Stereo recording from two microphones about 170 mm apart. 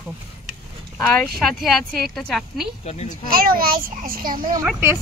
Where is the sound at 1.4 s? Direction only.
Centre (ahead or behind).